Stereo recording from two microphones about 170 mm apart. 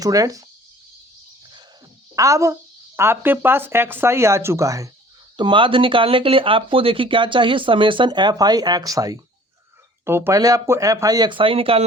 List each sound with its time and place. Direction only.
0.0 s speech: 20° right (ahead or behind)
2.1 s speech: 20° right (ahead or behind)
5.4 s speech: 30° right (ahead or behind)